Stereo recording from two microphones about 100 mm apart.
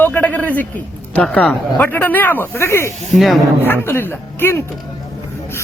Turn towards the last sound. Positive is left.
turn(degrees=20)  # may be behind; listen again after turning